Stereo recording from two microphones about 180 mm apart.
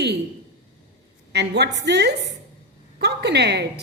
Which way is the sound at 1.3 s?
70° right (ahead or behind).